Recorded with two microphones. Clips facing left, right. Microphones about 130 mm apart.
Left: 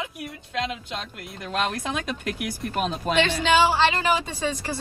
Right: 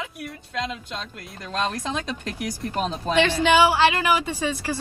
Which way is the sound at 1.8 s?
10° left (ahead or behind).